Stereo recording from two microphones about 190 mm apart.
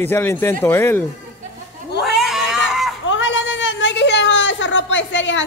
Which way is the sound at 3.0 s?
85° left.